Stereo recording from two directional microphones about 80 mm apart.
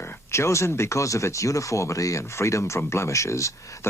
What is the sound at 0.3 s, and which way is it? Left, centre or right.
Speech, left.